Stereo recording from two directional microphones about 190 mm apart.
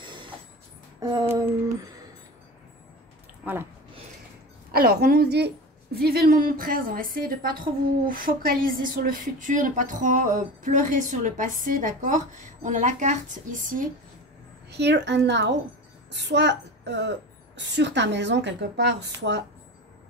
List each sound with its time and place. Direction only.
0.0 s a sound: 25° right (ahead or behind)
4.7 s a woman's voice: 50° right (ahead or behind)
14.7 s a woman's voice: 65° right (ahead or behind)